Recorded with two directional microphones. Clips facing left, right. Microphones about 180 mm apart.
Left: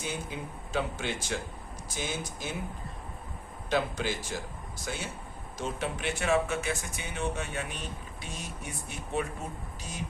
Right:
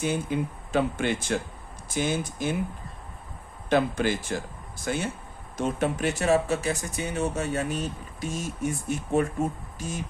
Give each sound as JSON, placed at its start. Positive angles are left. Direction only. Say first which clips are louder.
{"t": 0.0, "sound": "speech", "louder": "right 9 dB", "side_deg": -55}
{"t": 3.7, "sound": "speech", "louder": "right 6 dB", "side_deg": -50}
{"t": 5.5, "sound": "speech", "louder": "right 8 dB", "side_deg": -50}